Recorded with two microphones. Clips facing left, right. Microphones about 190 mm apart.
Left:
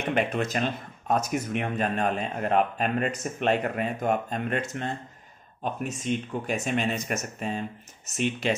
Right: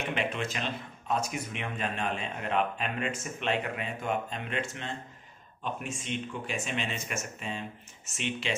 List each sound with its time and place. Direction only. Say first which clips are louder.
0.1 s speech: left 10 dB; 40° left (ahead or behind)